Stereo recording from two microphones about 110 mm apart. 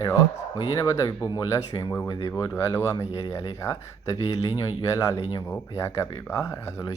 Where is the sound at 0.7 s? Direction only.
30° left (ahead or behind).